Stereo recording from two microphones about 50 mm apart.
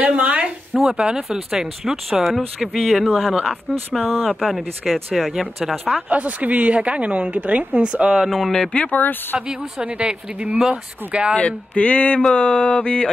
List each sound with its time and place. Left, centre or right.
0.0 s a sound: right
0.9 s a woman's voice: centre
1.5 s speech: centre
4.0 s speech: right
4.3 s speech: centre
5.3 s speech: centre
6.0 s a woman's voice: right
8.3 s speech: centre
8.7 s a sound: left
9.3 s speech: centre
9.8 s a woman's voice: right
11.3 s a sound: left